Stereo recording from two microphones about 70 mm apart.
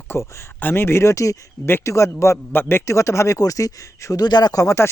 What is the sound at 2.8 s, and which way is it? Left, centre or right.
Speech, left.